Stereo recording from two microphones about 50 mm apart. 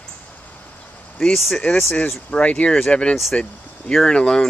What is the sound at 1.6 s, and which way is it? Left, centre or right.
Speech, left.